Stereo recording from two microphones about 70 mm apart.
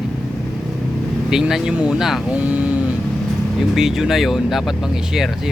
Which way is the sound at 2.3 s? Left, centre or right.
Centre.